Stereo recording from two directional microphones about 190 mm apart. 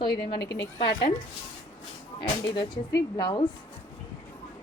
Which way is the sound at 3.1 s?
20° left (ahead or behind).